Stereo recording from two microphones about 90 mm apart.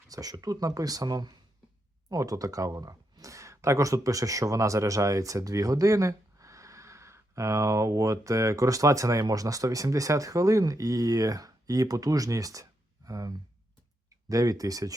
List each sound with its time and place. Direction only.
0.1 s speech: 45° right (ahead or behind)
2.0 s speech: 40° right (ahead or behind)